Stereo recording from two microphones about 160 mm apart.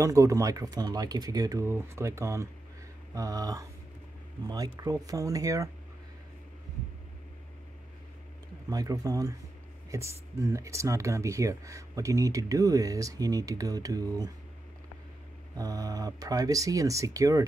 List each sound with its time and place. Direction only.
0.0 s speech: 20° right (ahead or behind)
8.6 s speech: 20° right (ahead or behind)
15.5 s speech: 25° right (ahead or behind)